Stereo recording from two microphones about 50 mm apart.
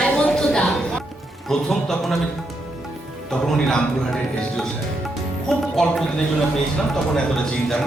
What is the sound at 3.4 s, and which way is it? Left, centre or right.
Speech, centre.